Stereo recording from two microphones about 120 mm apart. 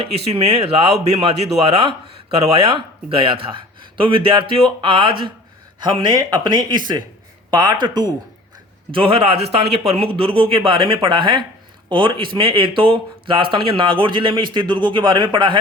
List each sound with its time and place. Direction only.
0.0 s speech: 55° right (ahead or behind); by 8.1 s 35° right (ahead or behind)
8.9 s speech: 50° right (ahead or behind)